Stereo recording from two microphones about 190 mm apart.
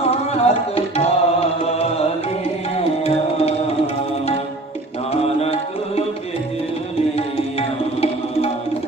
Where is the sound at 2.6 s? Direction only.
30° left (ahead or behind).